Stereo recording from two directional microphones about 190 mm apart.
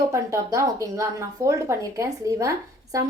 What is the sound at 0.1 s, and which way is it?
Speech, 15° right (ahead or behind).